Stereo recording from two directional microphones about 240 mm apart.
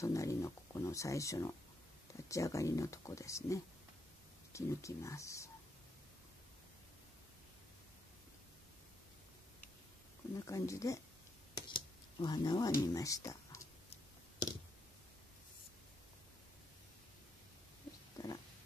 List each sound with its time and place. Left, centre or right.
0.0 s speech: centre
10.4 s speech: centre
11.5 s cat: centre
18.1 s pig: centre